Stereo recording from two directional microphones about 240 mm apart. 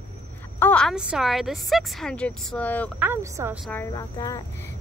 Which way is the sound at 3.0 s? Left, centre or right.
Centre.